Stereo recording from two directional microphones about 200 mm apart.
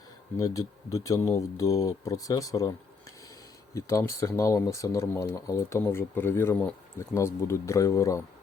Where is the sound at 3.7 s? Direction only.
15° left (ahead or behind).